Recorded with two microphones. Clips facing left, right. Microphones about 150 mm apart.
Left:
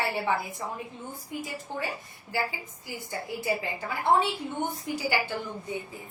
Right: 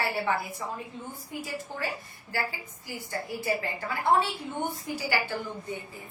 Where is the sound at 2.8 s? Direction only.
20° left (ahead or behind).